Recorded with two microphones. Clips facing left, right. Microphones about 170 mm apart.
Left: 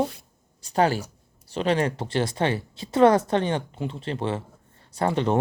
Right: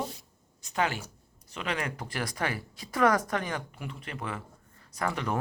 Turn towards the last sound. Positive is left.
turn(degrees=30)  # may be behind; listen again after turning